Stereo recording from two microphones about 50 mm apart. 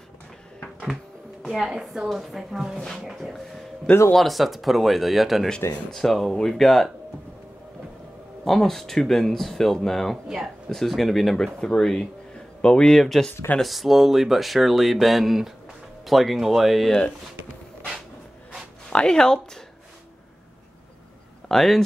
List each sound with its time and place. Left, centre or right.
1.4 s a sound: centre
1.7 s a woman's voice: centre
4.1 s speech: centre
8.5 s speech: centre
10.2 s a woman's voice: centre
10.7 s speech: centre
11.6 s speech: centre
13.0 s speech: centre
18.9 s speech: centre
21.5 s speech: centre